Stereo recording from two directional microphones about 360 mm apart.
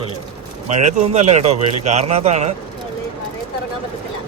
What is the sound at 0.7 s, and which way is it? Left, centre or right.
A man's voice, centre.